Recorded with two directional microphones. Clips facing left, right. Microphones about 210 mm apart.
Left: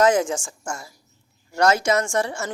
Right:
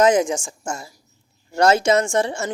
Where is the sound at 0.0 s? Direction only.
15° right (ahead or behind).